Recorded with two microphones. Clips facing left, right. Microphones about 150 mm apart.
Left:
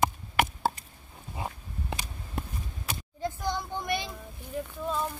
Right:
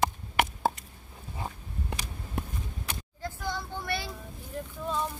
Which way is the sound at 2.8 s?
15° left (ahead or behind).